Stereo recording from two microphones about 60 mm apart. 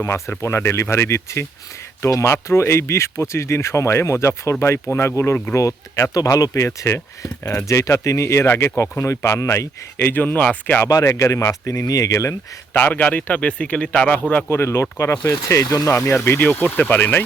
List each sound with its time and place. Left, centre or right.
0.0 s speech: left
5.5 s speech: left
6.7 s speech: left
10.0 s speech: left
11.0 s speech: left
12.7 s speech: left
14.5 s speech: left
15.9 s speech: left
16.1 s speech: left